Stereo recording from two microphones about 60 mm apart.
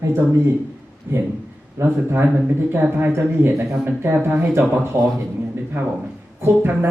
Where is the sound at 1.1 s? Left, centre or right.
Right.